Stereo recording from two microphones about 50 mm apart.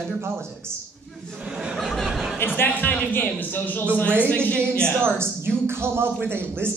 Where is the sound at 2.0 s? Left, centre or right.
Centre.